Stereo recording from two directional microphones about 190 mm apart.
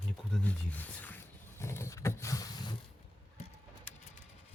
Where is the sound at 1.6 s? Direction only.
15° left (ahead or behind).